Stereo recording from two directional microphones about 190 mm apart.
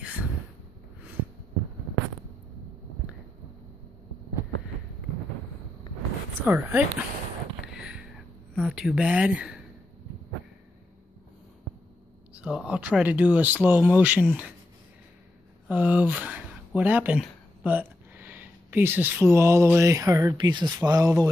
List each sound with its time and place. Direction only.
1.2 s heart sounds: 90° right
6.4 s speech: 10° right (ahead or behind)
7.6 s a sound: 5° right (ahead or behind)
8.5 s speech: centre (ahead or behind)
12.4 s speech: 5° right (ahead or behind)
15.7 s speech: 10° right (ahead or behind)